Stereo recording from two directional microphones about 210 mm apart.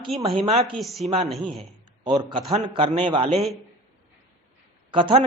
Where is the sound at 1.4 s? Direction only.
20° right (ahead or behind).